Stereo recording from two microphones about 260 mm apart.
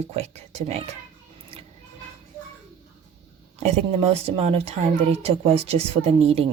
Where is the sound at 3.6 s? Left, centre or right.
Right.